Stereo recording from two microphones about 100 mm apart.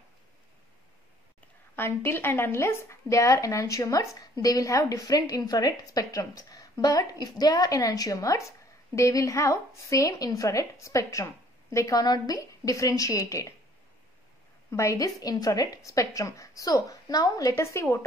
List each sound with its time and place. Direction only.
1.8 s a woman's voice: 25° left (ahead or behind)
14.7 s a woman's voice: 30° left (ahead or behind)